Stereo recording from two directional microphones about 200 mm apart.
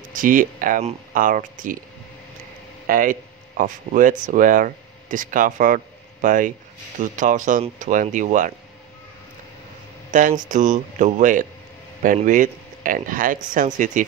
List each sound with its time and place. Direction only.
0.1 s speech: 45° right (ahead or behind)
2.9 s speech: 45° right (ahead or behind)
10.1 s speech: 40° right (ahead or behind)